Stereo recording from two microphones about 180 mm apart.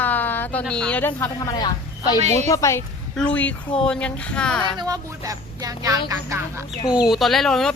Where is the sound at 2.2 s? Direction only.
40° right (ahead or behind).